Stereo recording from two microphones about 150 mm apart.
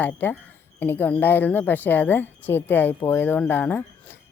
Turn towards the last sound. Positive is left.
turn(degrees=10)  # may be behind; listen again after turning